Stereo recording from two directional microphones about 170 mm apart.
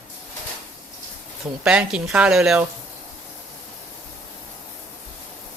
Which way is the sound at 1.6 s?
5° right (ahead or behind).